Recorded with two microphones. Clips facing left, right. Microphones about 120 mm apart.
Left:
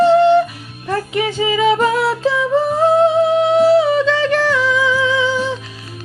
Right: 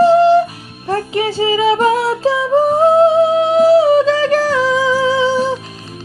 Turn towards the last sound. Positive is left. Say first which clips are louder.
# right 3 dB
turn(degrees=-40)  # may be behind; listen again after turning